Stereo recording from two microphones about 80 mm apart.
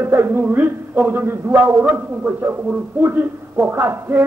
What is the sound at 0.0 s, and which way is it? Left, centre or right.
A man's voice, right.